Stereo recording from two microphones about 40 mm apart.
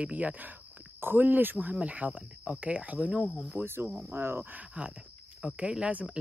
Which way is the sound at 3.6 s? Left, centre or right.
Right.